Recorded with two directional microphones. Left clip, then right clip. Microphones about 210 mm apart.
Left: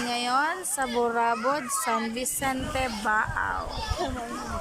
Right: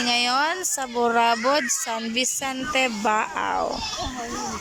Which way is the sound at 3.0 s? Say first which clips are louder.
Right 3 dB; 15° right (ahead or behind).